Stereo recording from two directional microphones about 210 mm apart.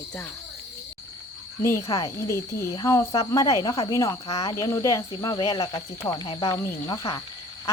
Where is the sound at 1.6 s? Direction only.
15° left (ahead or behind).